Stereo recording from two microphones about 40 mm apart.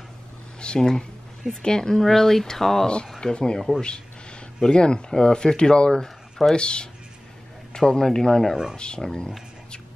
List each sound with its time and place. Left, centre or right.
0.6 s a sound: centre
1.6 s speech: centre
3.2 s speech: left
4.6 s speech: left
8.7 s speech: left